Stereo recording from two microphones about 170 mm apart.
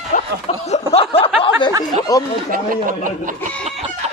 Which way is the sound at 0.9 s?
35° left (ahead or behind).